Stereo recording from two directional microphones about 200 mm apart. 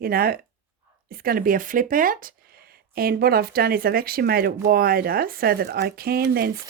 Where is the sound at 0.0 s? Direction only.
50° right (ahead or behind).